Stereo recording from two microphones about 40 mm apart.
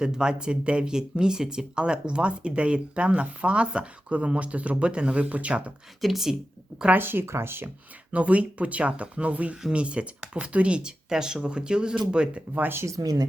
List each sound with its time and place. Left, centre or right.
0.0 s speech: right
6.0 s a woman's voice: centre
6.9 s speech: right
8.1 s speech: right